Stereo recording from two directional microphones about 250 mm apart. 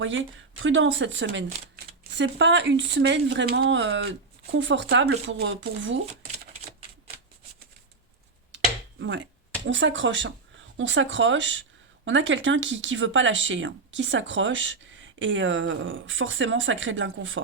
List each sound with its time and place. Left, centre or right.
0.0 s speech: right
8.5 s a sound: right
9.6 s speech: right